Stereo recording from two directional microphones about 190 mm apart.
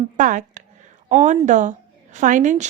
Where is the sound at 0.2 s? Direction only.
45° right (ahead or behind).